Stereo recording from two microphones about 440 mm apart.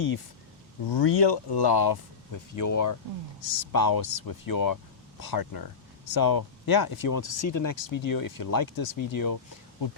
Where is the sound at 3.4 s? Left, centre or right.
Left.